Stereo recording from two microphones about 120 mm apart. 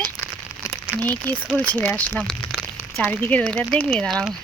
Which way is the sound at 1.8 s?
10° left (ahead or behind).